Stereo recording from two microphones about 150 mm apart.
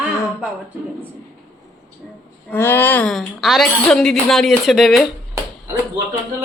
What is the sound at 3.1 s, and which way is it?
A woman's voice, centre (ahead or behind).